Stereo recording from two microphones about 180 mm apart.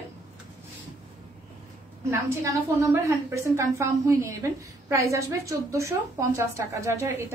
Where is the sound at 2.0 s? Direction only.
15° right (ahead or behind).